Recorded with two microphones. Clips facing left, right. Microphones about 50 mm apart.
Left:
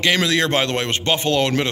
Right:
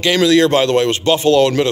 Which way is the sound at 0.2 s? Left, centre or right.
Left.